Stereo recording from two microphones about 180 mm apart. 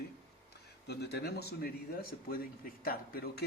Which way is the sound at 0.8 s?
65° left (ahead or behind).